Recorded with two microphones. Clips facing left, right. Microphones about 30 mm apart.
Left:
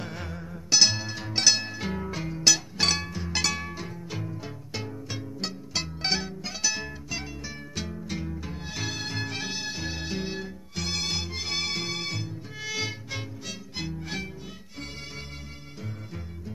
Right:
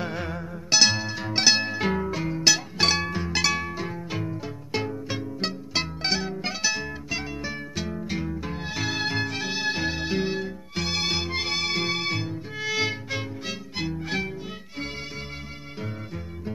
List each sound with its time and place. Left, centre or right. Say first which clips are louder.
0.0 s music: right 6 dB; centre
0.7 s music: right 2 dB; centre
2.0 s music: left 2 dB; centre
6.0 s music: even; centre
7.9 s music: right 5 dB; right
9.2 s music: right 4 dB; centre
9.6 s music: right 8 dB; right
9.8 s music: right 6 dB; centre
11.2 s music: right 6 dB; right
11.5 s music: right 2 dB; centre
12.5 s violin: right 6 dB; centre